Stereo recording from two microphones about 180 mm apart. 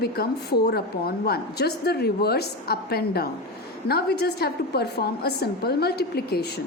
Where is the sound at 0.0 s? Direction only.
65° left (ahead or behind).